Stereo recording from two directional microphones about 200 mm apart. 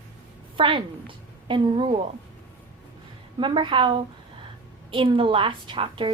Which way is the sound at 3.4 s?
25° right (ahead or behind).